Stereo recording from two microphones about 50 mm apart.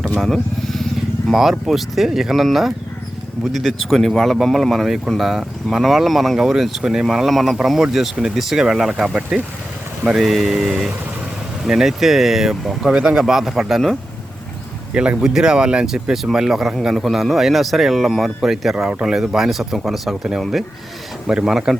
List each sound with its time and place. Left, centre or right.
0.2 s vehicle: centre
1.3 s speech: centre
10.2 s speech: centre
15.2 s speech: centre
21.3 s speech: centre